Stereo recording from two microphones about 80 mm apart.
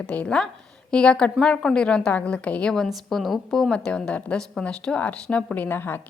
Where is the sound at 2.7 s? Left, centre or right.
Centre.